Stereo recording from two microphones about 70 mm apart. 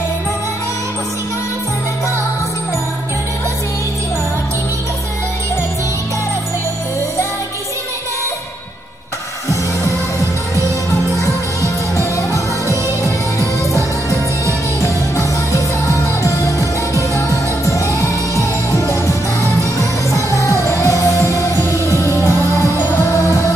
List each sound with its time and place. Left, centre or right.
12.0 s music: left